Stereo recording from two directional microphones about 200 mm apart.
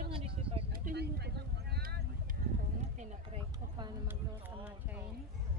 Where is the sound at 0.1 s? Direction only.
30° right (ahead or behind).